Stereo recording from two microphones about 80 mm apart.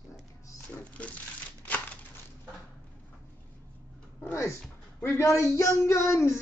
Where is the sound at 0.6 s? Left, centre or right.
Centre.